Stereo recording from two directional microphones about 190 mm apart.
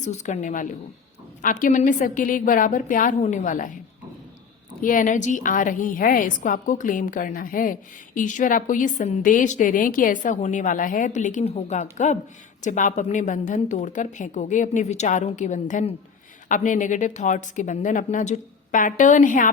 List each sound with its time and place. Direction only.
0.0 s a woman's voice: 40° left (ahead or behind)
4.8 s a woman's voice: 45° left (ahead or behind)